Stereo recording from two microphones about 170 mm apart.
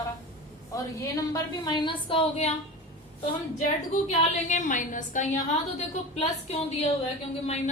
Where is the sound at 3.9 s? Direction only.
45° left (ahead or behind).